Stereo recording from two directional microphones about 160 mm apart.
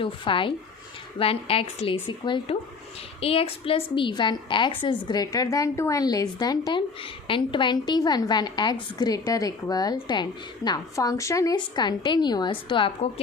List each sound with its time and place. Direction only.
0.0 s a woman's voice: 30° left (ahead or behind)